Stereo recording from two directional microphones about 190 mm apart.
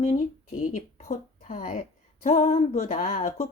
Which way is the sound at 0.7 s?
45° left (ahead or behind).